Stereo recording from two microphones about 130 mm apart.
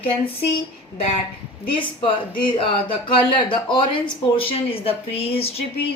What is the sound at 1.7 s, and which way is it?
Speech, 40° left (ahead or behind).